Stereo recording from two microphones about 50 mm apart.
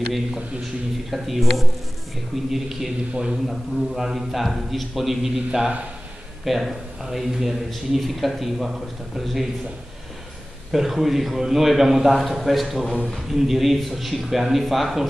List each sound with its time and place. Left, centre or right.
1.1 s speech: centre
3.1 s a man's voice: centre
3.4 s speech: centre
10.7 s speech: centre